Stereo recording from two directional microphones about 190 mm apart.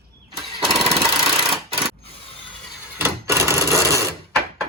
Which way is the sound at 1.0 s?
30° right (ahead or behind).